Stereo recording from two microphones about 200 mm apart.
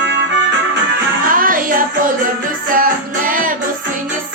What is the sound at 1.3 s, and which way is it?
Child singing, 45° right (ahead or behind).